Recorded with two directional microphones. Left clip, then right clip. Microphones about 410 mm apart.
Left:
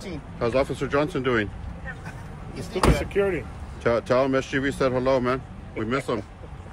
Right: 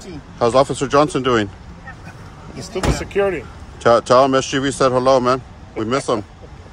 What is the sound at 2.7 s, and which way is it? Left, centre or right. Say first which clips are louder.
Speech: right 3 dB; right.